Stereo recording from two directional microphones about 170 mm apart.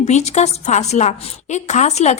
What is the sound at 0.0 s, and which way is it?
A woman's voice, 40° left (ahead or behind).